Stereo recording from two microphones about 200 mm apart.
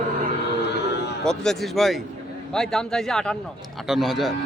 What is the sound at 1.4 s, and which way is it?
A man's voice, centre (ahead or behind).